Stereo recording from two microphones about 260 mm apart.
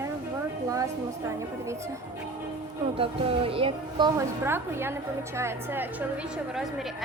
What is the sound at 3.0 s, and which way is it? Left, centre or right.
A woman's voice, right.